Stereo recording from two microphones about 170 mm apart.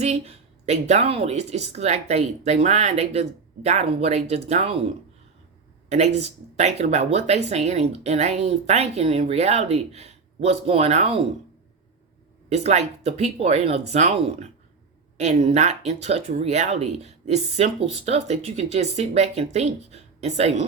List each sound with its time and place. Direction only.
0.0 s speech: 40° right (ahead or behind)
6.1 s speech: 40° right (ahead or behind)
12.5 s speech: 40° right (ahead or behind)